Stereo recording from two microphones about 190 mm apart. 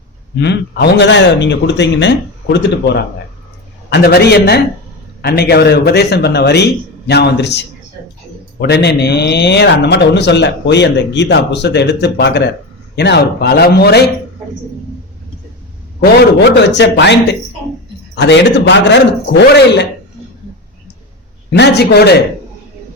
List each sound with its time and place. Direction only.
0.3 s a man's voice: 65° left (ahead or behind)
16.4 s a man's voice: 65° left (ahead or behind)
21.5 s speech: 60° left (ahead or behind)